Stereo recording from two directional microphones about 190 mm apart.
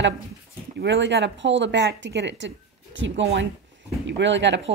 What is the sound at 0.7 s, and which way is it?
Speech, 65° right (ahead or behind).